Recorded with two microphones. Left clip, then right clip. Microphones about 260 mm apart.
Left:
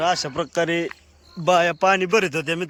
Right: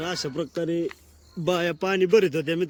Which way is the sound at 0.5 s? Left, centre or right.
Left.